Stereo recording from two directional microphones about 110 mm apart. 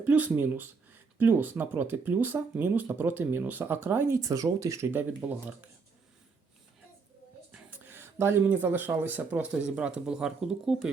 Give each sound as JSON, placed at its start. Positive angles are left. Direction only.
{"t": 0.0, "sound": "speech", "side_deg": -15}
{"t": 5.2, "sound": "speech", "side_deg": -15}
{"t": 7.5, "sound": "speech", "side_deg": -15}